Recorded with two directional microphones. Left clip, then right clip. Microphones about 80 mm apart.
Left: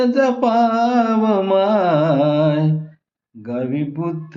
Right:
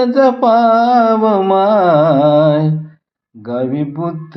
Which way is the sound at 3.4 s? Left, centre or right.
Right.